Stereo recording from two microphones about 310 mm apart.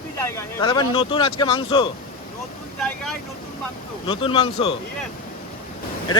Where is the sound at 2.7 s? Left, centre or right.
Centre.